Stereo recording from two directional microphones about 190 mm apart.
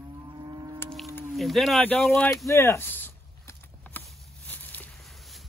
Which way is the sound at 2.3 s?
15° left (ahead or behind).